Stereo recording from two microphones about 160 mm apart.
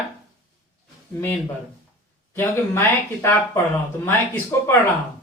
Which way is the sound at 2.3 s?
15° left (ahead or behind).